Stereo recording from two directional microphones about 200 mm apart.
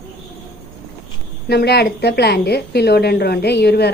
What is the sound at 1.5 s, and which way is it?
A woman's voice, 55° left (ahead or behind).